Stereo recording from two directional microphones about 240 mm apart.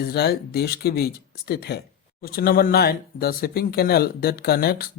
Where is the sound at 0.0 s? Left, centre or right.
Left.